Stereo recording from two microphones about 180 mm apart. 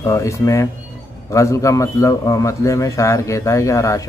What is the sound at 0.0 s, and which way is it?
Speech, 15° left (ahead or behind).